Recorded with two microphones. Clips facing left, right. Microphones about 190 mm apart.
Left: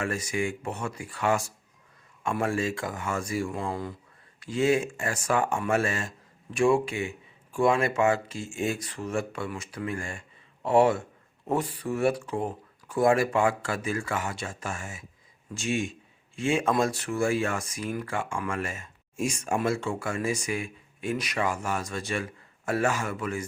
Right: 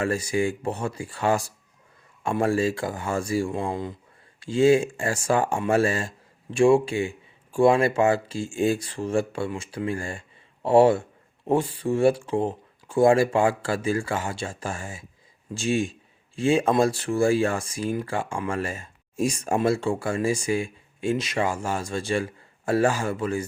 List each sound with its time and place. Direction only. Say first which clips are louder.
0.0 s speech: right 5 dB; 30° right (ahead or behind)